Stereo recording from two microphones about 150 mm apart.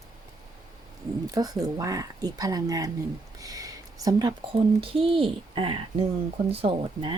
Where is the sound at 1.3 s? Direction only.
25° right (ahead or behind).